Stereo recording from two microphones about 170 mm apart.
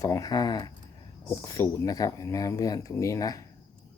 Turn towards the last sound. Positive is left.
turn(degrees=20)  # may be behind; listen again after turning